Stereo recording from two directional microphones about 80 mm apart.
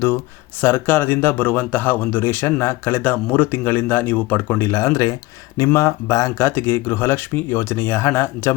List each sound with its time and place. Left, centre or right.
0.6 s speech: left